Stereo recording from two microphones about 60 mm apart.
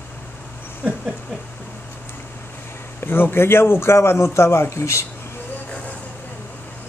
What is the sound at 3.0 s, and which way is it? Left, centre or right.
A man's voice, left.